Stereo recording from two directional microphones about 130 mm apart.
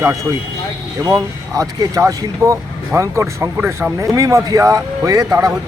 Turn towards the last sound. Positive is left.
turn(degrees=-30)  # may be behind; listen again after turning